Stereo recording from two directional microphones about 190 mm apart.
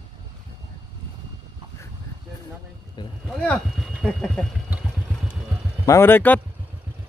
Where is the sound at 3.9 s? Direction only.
Centre (ahead or behind).